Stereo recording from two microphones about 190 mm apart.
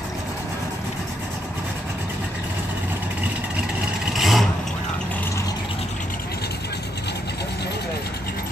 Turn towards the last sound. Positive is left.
turn(degrees=60)  # may be behind; listen again after turning